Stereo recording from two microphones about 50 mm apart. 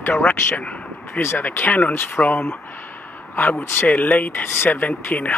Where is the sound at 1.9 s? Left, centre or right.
Left.